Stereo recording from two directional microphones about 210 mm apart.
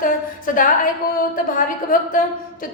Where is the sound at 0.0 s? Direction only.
40° left (ahead or behind).